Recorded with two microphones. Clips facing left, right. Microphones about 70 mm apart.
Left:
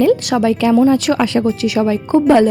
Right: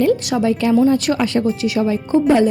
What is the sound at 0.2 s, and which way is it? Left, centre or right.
A woman's voice, left.